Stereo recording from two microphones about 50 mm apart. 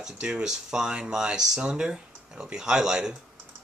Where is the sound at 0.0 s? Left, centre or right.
Centre.